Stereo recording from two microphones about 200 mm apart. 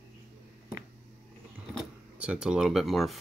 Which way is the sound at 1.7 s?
5° right (ahead or behind).